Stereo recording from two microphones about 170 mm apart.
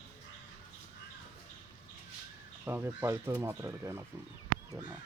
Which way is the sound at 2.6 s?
10° right (ahead or behind).